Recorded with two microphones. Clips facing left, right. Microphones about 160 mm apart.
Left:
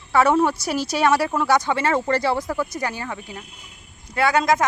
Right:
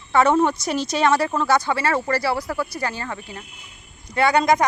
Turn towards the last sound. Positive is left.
turn(degrees=0)  # may be behind; listen again after turning